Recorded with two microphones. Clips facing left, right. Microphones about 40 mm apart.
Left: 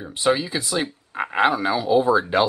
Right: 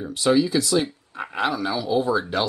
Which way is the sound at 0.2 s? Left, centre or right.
Left.